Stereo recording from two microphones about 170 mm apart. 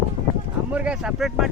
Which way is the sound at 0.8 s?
5° right (ahead or behind).